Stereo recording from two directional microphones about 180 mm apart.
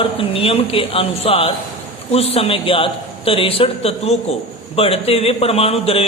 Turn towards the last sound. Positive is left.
turn(degrees=35)  # may be behind; listen again after turning